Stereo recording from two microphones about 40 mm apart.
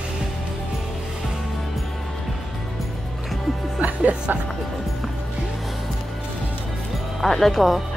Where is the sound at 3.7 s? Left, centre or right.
Right.